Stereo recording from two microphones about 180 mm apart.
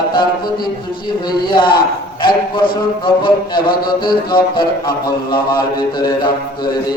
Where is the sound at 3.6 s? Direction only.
55° left (ahead or behind).